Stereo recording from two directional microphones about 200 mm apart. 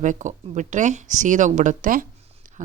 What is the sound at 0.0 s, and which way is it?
Speech, 40° right (ahead or behind).